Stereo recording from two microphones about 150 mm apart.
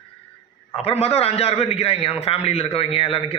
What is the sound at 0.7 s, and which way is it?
A man's voice, 40° left (ahead or behind).